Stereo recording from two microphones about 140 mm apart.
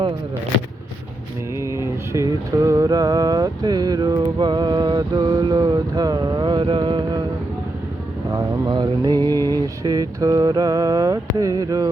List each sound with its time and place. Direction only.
1.5 s a sound: 20° right (ahead or behind)
4.4 s vehicle: 30° right (ahead or behind)
8.3 s mantra: 30° right (ahead or behind)
9.2 s mantra: 20° left (ahead or behind)
9.8 s mantra: 25° right (ahead or behind)